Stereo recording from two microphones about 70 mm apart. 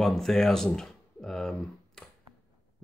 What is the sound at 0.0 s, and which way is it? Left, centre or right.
Speech, centre.